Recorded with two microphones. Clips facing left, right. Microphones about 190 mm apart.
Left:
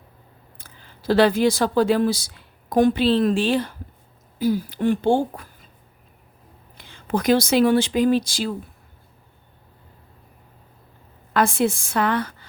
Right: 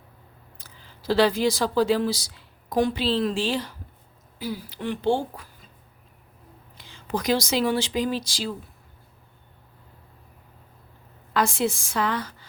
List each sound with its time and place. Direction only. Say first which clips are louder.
0.6 s speech: left 5 dB; 55° left (ahead or behind)
6.7 s speech: left 5 dB; 55° left (ahead or behind)
11.3 s a woman's voice: left 4 dB; 55° left (ahead or behind)